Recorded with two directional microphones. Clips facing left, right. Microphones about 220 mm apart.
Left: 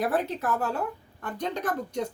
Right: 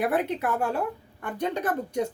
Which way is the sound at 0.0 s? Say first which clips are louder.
Right 2 dB; 10° right (ahead or behind).